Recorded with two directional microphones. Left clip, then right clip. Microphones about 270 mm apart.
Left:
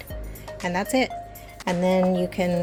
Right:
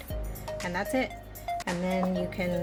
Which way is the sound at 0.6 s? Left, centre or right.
Left.